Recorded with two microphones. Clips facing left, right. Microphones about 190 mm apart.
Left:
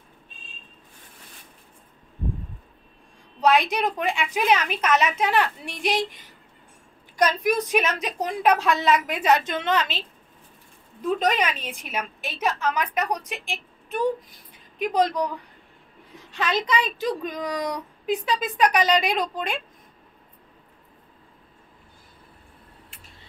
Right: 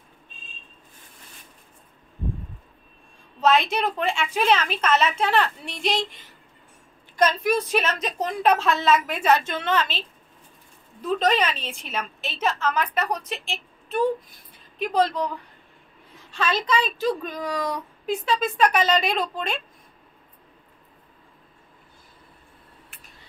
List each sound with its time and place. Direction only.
3.3 s speech: 15° left (ahead or behind)
7.2 s speech: 15° left (ahead or behind)
16.3 s speech: 20° left (ahead or behind)